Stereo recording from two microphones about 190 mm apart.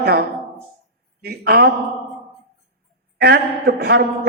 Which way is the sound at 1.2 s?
55° right (ahead or behind).